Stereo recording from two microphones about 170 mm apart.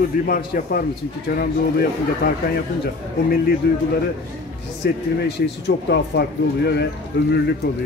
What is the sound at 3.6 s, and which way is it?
A man's voice, 75° left (ahead or behind).